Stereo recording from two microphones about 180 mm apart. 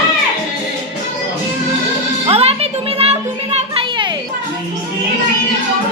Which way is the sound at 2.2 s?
35° right (ahead or behind).